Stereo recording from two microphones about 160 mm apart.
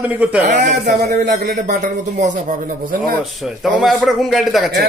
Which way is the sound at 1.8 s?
50° right (ahead or behind).